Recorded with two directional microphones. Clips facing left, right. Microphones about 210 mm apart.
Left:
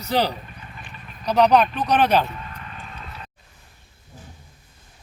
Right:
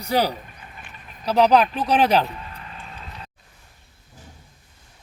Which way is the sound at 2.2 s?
30° right (ahead or behind).